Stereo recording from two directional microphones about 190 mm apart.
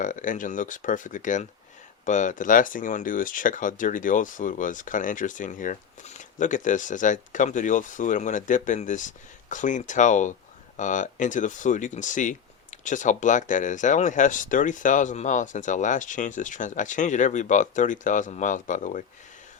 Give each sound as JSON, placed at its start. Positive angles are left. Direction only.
{"t": 0.0, "sound": "speech", "side_deg": 40}